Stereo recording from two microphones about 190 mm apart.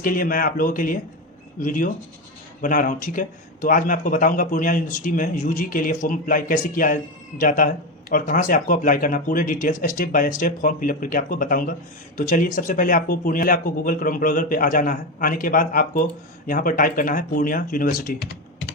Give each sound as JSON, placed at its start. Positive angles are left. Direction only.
{"t": 0.0, "sound": "speech", "side_deg": 45}